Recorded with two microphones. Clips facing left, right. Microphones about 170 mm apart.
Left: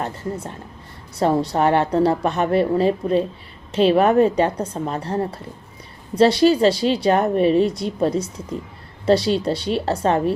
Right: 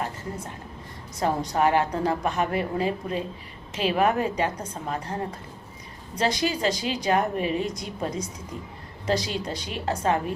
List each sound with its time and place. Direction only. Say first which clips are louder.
1.2 s a woman's voice: left 5 dB; 30° left (ahead or behind)